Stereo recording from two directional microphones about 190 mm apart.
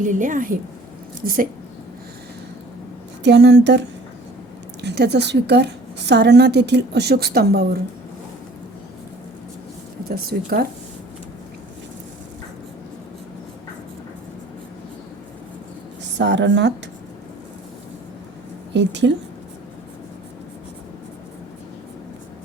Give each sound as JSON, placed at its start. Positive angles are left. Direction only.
{"t": 0.0, "sound": "a woman's voice", "side_deg": -40}
{"t": 3.2, "sound": "a woman's voice", "side_deg": -65}
{"t": 10.2, "sound": "a woman's voice", "side_deg": -55}
{"t": 16.1, "sound": "speech", "side_deg": -65}
{"t": 18.7, "sound": "speech", "side_deg": -70}